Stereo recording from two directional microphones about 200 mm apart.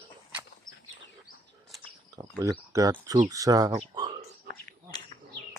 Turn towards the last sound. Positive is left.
turn(degrees=20)  # may be behind; listen again after turning